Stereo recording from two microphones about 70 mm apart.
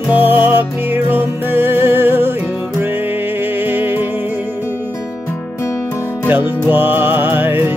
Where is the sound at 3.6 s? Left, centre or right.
Right.